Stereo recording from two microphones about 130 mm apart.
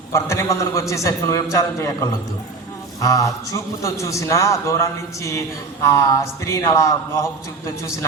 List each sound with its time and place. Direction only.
0.1 s speech: 25° left (ahead or behind)